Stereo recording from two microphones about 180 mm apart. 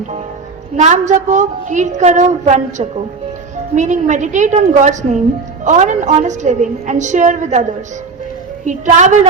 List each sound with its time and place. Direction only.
0.8 s a woman's voice: 40° right (ahead or behind)